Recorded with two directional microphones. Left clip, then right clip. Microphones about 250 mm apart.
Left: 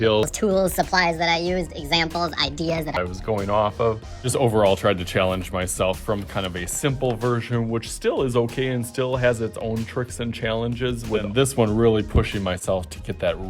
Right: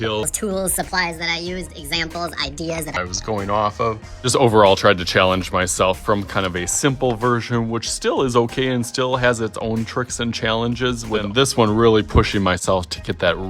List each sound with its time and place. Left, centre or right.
0.0 s speech: centre